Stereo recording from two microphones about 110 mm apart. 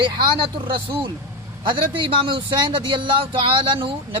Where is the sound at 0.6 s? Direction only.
50° right (ahead or behind).